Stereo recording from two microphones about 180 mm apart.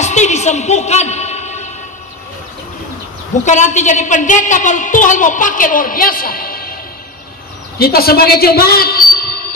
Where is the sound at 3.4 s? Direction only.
40° left (ahead or behind).